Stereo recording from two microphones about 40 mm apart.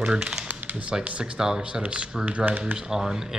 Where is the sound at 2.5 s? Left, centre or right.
Right.